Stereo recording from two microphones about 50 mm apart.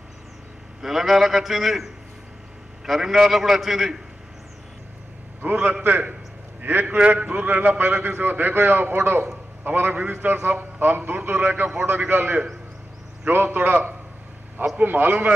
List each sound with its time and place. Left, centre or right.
0.8 s a man's voice: centre
5.4 s a man's voice: right
14.8 s a man's voice: right